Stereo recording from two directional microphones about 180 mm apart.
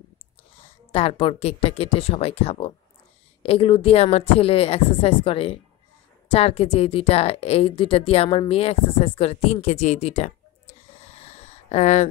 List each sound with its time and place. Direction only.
0.6 s speech: 35° left (ahead or behind)